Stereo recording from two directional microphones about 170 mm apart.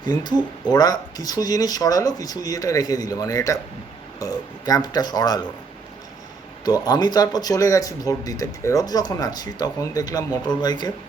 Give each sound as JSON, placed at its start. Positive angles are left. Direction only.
{"t": 0.0, "sound": "speech", "side_deg": 25}
{"t": 6.7, "sound": "speech", "side_deg": 25}